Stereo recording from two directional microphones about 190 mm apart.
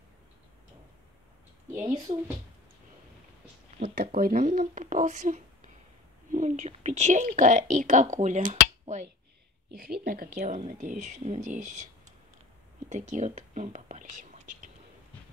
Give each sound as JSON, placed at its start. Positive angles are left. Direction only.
{"t": 1.7, "sound": "a woman's voice", "side_deg": -15}
{"t": 3.9, "sound": "speech", "side_deg": -55}
{"t": 9.8, "sound": "speech", "side_deg": -50}
{"t": 12.9, "sound": "speech", "side_deg": -40}